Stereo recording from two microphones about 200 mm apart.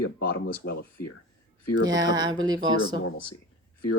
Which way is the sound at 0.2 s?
55° left (ahead or behind).